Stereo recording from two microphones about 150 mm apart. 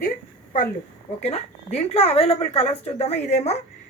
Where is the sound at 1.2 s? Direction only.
45° left (ahead or behind).